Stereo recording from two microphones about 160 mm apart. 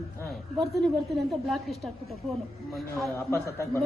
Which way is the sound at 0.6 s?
Centre (ahead or behind).